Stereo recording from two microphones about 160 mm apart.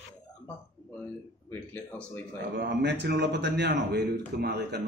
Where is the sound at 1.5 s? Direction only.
15° left (ahead or behind).